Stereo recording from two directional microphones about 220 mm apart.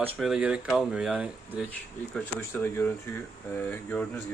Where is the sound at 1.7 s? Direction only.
5° left (ahead or behind).